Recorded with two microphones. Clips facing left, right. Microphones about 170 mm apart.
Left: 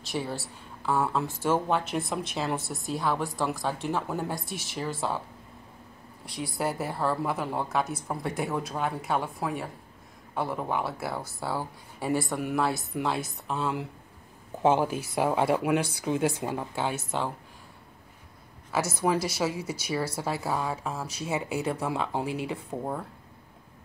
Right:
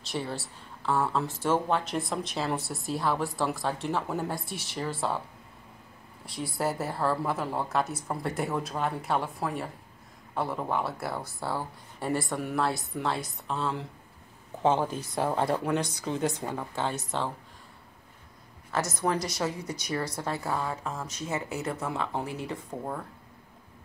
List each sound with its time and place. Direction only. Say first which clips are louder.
0.1 s a woman's voice: left 1 dB; 5° left (ahead or behind)
6.2 s a woman's voice: even; centre (ahead or behind)
18.7 s a woman's voice: left 2 dB; 5° left (ahead or behind)